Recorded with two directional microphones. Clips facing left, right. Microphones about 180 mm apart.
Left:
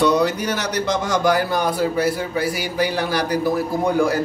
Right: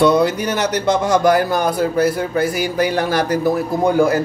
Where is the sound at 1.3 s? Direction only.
45° right (ahead or behind).